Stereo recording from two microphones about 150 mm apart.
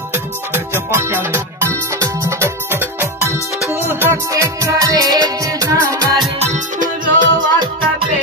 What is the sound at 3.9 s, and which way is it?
Music, 15° right (ahead or behind).